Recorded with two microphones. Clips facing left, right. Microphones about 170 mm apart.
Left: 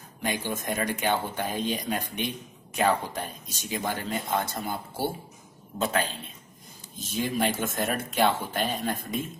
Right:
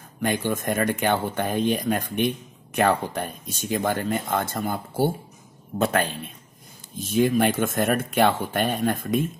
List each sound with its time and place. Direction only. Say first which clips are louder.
0.2 s speech: right 6 dB; 55° right (ahead or behind)